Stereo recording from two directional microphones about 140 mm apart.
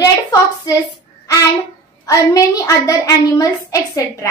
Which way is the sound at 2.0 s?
25° left (ahead or behind).